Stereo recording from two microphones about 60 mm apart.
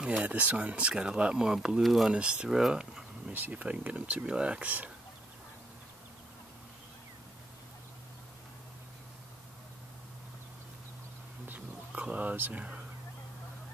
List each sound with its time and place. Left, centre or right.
0.0 s speech: centre
2.1 s speech: centre
3.3 s speech: right
11.4 s a sound: right
12.5 s speech: right